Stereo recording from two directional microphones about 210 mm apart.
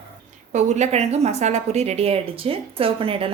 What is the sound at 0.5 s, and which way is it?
Speech, 35° right (ahead or behind).